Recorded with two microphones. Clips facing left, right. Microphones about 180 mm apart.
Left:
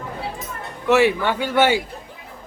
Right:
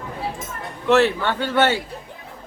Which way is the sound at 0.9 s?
10° left (ahead or behind).